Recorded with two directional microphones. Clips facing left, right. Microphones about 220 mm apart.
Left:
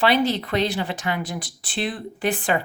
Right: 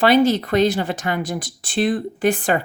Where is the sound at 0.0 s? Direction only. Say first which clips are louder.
Right 5 dB; 45° right (ahead or behind).